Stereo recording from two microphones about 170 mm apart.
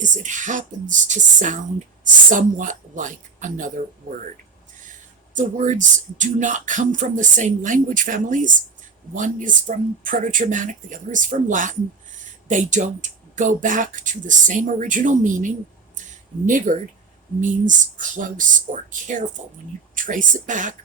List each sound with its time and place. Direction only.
0.0 s speech: 45° right (ahead or behind)
5.3 s speech: 45° right (ahead or behind)